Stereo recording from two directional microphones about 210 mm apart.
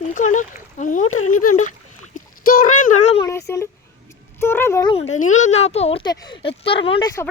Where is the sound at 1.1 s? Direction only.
85° left.